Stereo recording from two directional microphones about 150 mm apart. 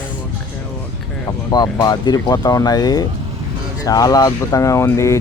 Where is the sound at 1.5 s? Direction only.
25° left (ahead or behind).